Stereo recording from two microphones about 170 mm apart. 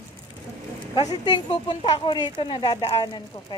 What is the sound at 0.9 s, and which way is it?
Speech, 25° left (ahead or behind).